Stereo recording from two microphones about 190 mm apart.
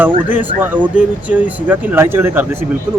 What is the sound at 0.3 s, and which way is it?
Speech, 10° right (ahead or behind).